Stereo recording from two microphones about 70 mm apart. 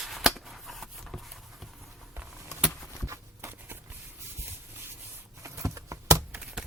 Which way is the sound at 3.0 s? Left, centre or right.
Right.